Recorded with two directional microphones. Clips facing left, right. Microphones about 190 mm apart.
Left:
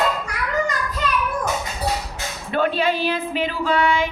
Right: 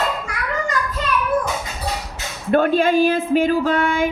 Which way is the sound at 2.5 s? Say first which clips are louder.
Right 5 dB; 45° right (ahead or behind).